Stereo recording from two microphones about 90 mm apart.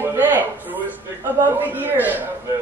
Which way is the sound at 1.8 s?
20° right (ahead or behind).